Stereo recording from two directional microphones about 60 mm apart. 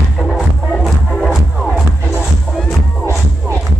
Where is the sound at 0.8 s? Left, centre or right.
Centre.